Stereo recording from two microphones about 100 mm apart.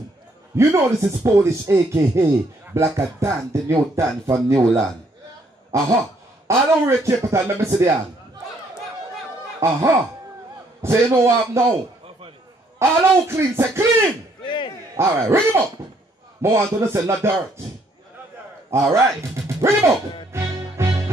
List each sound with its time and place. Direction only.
0.7 s speech: 30° right (ahead or behind)
5.7 s speech: 30° right (ahead or behind)
9.6 s speech: 30° right (ahead or behind)
10.8 s speech: 25° right (ahead or behind)
12.7 s speech: 25° right (ahead or behind)
14.4 s a sound: 50° left (ahead or behind)
15.0 s speech: 25° right (ahead or behind)
18.7 s speech: 30° right (ahead or behind)
20.3 s music: 25° right (ahead or behind)